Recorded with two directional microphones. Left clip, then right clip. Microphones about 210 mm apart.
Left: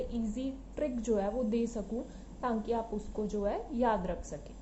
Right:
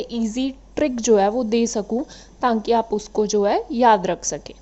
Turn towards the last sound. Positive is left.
turn(degrees=-50)  # may be behind; listen again after turning